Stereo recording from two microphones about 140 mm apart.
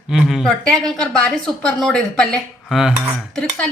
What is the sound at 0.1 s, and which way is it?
Speech, centre (ahead or behind).